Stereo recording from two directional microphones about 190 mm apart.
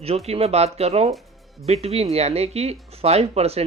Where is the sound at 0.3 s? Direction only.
35° right (ahead or behind).